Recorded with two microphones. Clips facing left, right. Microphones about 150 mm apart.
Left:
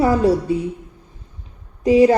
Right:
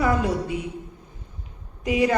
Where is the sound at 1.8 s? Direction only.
30° left (ahead or behind).